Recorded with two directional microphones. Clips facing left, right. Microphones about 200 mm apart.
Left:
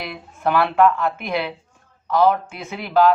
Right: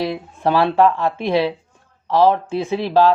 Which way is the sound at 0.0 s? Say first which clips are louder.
Right 4 dB; 30° right (ahead or behind).